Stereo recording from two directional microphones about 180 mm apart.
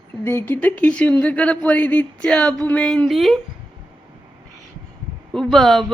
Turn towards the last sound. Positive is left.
turn(degrees=0)  # may be behind; listen again after turning